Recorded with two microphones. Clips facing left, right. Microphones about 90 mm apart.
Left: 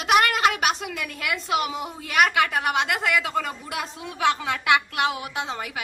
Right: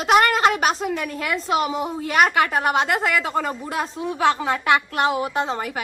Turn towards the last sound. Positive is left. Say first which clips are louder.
# right 6 dB
turn(degrees=-40)  # may be behind; listen again after turning